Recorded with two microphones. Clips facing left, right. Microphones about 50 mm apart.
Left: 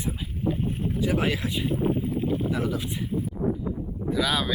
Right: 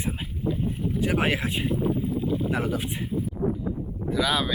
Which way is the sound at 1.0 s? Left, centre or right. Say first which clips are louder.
Right 1 dB; right.